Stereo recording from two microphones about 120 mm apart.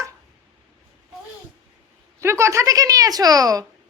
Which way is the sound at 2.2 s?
20° right (ahead or behind).